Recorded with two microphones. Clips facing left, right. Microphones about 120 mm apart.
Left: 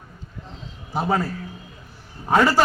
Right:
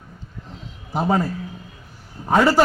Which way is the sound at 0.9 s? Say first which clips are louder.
Right 2 dB; 15° right (ahead or behind).